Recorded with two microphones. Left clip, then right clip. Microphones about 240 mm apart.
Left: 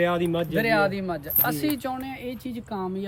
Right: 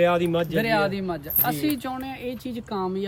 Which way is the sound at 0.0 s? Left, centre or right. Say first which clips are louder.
Right 3 dB; centre.